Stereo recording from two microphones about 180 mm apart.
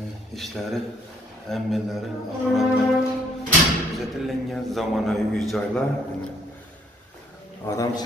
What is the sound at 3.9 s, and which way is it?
A man's voice, centre (ahead or behind).